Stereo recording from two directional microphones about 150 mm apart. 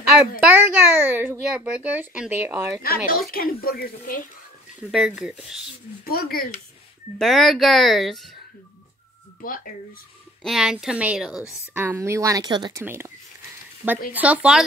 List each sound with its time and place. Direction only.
0.4 s a child's voice: 15° right (ahead or behind)
2.8 s speech: 80° left
4.9 s speech: 5° right (ahead or behind)
6.0 s speech: 80° left
7.2 s speech: centre (ahead or behind)
9.4 s speech: 70° left (ahead or behind)
10.4 s speech: 5° right (ahead or behind); by 12.8 s 30° right (ahead or behind)
12.8 s speech: 15° right (ahead or behind)
14.1 s speech: 10° right (ahead or behind)